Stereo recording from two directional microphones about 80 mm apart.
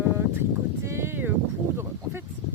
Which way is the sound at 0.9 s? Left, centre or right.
Right.